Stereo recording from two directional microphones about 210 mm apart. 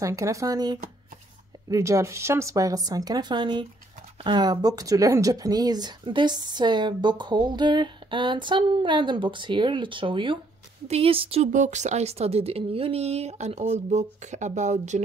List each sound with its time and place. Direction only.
0.0 s a woman's voice: 15° right (ahead or behind); by 15.0 s 35° right (ahead or behind)